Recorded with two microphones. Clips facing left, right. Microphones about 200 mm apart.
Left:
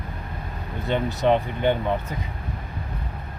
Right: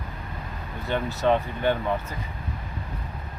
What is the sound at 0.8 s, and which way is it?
Speech, 20° left (ahead or behind).